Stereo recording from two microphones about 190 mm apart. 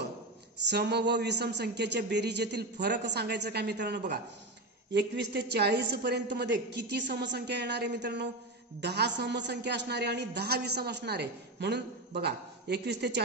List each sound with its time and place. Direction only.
0.7 s a man's voice: 60° right (ahead or behind)